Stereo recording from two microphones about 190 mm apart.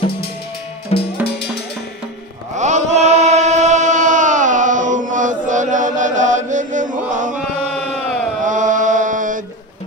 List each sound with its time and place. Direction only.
0.9 s music: 35° left (ahead or behind)
1.2 s music: 60° left (ahead or behind)
2.5 s chant: 40° right (ahead or behind)
8.5 s mantra: 40° right (ahead or behind)